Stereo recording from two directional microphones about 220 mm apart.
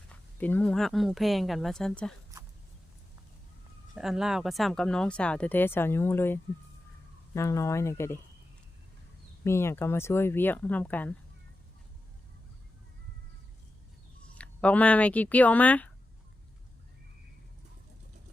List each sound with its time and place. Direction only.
0.1 s speech: 10° left (ahead or behind)
3.9 s speech: centre (ahead or behind)
9.4 s speech: 10° left (ahead or behind)
14.3 s speech: 5° left (ahead or behind)